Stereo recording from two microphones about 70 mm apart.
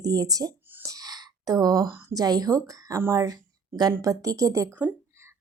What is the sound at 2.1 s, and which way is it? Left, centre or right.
Speech, right.